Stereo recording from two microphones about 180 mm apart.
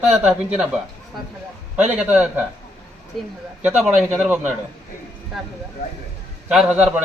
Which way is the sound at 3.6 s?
5° right (ahead or behind).